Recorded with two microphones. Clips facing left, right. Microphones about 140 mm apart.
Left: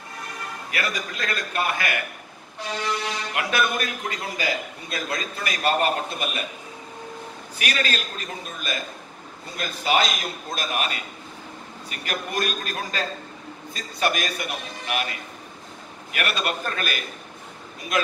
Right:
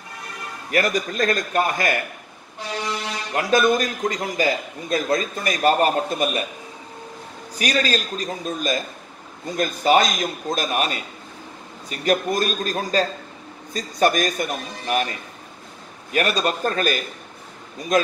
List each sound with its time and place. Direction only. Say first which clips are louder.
0.7 s a man's voice: right 9 dB; 40° right (ahead or behind)
3.3 s a man's voice: right 7 dB; 35° right (ahead or behind)
7.5 s a man's voice: right 5 dB; 35° right (ahead or behind)